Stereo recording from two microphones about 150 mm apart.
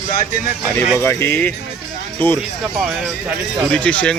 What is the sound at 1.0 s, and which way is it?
Speech, 15° left (ahead or behind).